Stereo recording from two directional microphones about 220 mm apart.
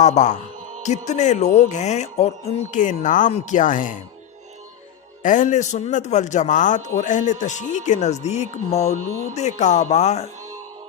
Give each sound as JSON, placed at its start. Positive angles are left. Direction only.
{"t": 0.0, "sound": "a man's voice", "side_deg": 30}
{"t": 5.2, "sound": "a man's voice", "side_deg": 35}